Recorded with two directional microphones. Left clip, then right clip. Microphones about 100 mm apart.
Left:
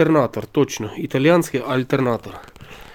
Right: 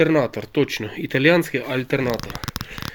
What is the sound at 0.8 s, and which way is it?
Speech, 35° left (ahead or behind).